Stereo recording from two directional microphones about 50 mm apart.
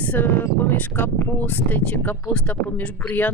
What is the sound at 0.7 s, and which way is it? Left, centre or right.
Speech, left.